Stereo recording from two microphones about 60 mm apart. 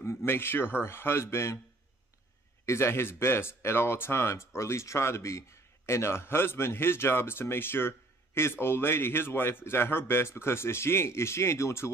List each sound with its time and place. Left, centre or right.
0.0 s a man's voice: left
2.6 s speech: left